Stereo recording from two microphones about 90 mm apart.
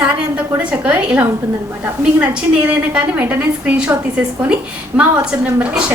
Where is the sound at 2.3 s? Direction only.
15° right (ahead or behind).